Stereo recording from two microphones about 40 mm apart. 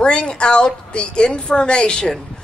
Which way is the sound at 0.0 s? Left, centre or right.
Left.